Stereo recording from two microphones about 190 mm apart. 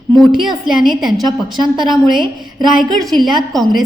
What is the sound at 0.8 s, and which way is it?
Speech, 25° right (ahead or behind).